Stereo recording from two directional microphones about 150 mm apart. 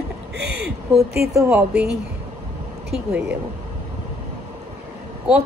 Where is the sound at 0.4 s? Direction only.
90° right.